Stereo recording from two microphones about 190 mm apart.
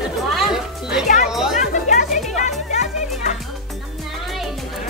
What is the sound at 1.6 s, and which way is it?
Music, 40° left (ahead or behind).